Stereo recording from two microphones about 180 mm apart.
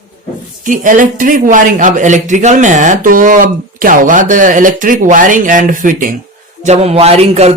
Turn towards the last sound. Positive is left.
turn(degrees=-35)  # may be behind; listen again after turning